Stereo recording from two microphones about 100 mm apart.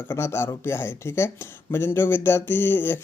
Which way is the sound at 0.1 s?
25° left (ahead or behind).